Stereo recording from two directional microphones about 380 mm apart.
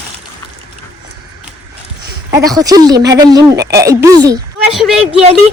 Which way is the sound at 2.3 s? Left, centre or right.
Centre.